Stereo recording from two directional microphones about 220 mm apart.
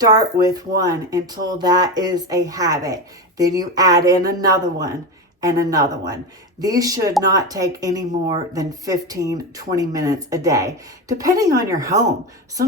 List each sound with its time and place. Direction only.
0.0 s speech: 15° right (ahead or behind)